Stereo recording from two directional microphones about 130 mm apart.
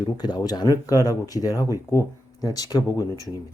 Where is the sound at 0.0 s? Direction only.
35° left (ahead or behind).